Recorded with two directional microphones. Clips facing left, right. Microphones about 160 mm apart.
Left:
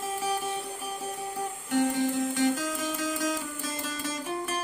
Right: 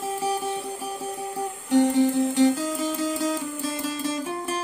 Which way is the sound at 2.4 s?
30° right (ahead or behind).